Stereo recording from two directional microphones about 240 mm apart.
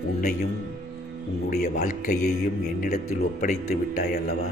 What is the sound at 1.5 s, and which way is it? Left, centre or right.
Speech, left.